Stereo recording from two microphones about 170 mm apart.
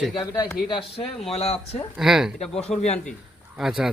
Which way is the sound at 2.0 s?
5° right (ahead or behind).